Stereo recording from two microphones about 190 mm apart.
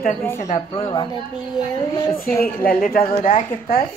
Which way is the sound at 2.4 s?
50° left (ahead or behind).